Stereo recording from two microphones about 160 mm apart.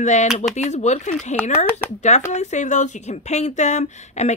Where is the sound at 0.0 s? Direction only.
45° left (ahead or behind).